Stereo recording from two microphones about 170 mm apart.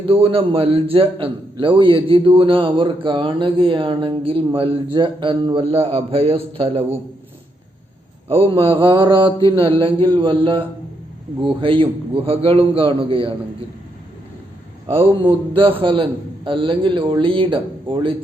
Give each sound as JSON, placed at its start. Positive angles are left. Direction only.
{"t": 0.1, "sound": "a man's voice", "side_deg": -35}
{"t": 8.3, "sound": "a man's voice", "side_deg": -35}
{"t": 14.9, "sound": "a man's voice", "side_deg": -15}
{"t": 15.5, "sound": "a man's voice", "side_deg": -30}